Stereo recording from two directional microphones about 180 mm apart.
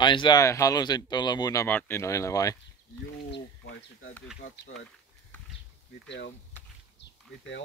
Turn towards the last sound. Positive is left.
turn(degrees=70)  # may be behind; listen again after turning